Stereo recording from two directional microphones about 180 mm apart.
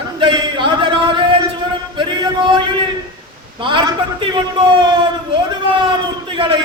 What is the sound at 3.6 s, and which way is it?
A man's voice, 25° right (ahead or behind).